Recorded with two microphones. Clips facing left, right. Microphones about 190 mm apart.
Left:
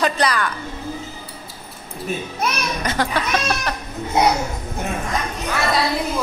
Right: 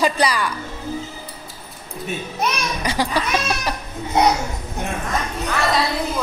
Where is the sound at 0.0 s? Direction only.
10° right (ahead or behind).